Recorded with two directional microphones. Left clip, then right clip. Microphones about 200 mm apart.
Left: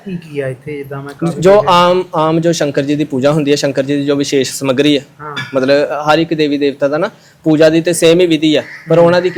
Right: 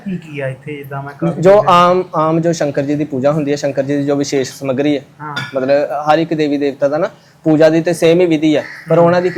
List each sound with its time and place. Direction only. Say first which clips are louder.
0.3 s speech: left 4 dB; 50° left (ahead or behind)
1.2 s speech: even; 20° left (ahead or behind)